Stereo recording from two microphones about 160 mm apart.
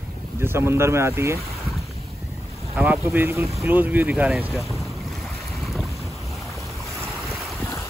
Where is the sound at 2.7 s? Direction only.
10° right (ahead or behind).